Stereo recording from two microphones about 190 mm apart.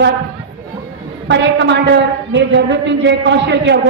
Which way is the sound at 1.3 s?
70° right (ahead or behind).